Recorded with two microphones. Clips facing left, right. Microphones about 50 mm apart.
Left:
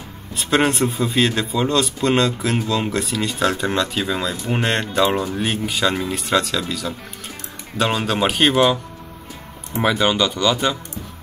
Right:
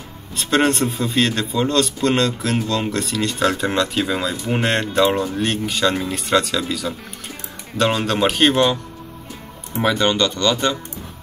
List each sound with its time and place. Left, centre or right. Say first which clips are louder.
0.4 s speech: even; centre
9.8 s speech: even; centre